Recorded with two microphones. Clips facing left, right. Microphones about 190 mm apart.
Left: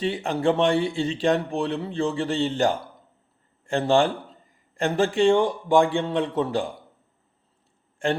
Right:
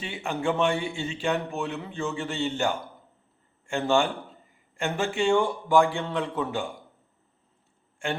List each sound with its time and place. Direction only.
0.0 s a man's voice: 35° left (ahead or behind)